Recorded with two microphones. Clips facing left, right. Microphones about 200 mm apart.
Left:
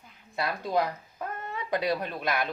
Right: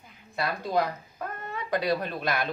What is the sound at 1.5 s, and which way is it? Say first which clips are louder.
Speech: right 1 dB; 20° left (ahead or behind).